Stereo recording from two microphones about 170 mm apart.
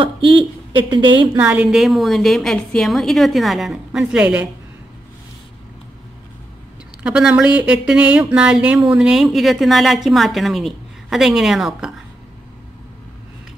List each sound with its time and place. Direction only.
0.7 s a woman's voice: 25° right (ahead or behind)
1.4 s a woman's voice: 5° right (ahead or behind)
7.0 s a woman's voice: 5° right (ahead or behind)